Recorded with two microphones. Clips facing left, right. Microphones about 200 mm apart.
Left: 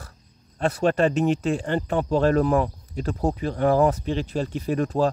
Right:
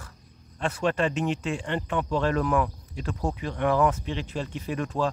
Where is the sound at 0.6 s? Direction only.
40° left (ahead or behind).